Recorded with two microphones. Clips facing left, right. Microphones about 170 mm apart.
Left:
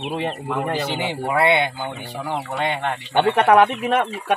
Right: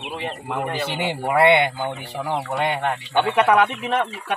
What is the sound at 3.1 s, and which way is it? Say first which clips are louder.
Speech: left 3 dB; 50° left (ahead or behind).